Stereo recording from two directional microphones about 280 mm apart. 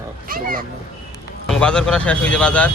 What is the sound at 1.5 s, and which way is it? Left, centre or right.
Speech, centre.